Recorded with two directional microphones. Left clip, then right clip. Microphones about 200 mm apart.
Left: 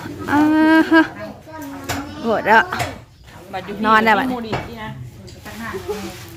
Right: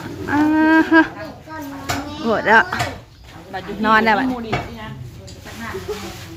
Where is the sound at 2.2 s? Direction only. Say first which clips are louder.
Even; centre (ahead or behind).